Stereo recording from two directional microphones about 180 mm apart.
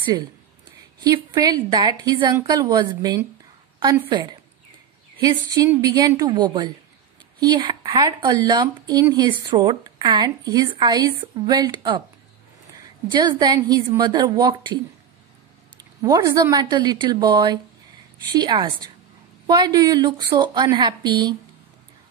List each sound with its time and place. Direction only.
0.0 s speech: 20° right (ahead or behind)
13.1 s speech: 25° right (ahead or behind)
16.0 s speech: 20° right (ahead or behind)